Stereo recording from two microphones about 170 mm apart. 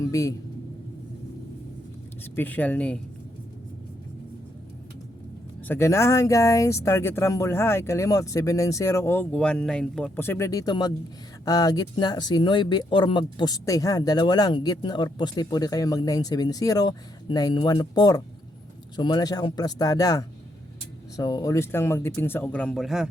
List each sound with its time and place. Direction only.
0.0 s speech: 20° left (ahead or behind)
2.3 s speech: 10° left (ahead or behind)
5.6 s speech: 15° left (ahead or behind)
10.2 s speech: 15° left (ahead or behind); by 23.0 s centre (ahead or behind)